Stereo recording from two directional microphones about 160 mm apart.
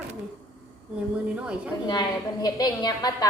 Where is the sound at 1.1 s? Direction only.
5° right (ahead or behind).